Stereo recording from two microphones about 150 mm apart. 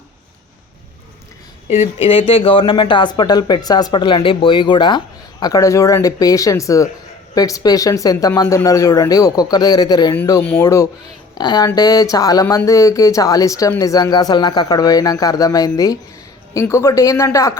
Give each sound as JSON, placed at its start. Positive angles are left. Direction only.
{"t": 1.7, "sound": "speech", "side_deg": 40}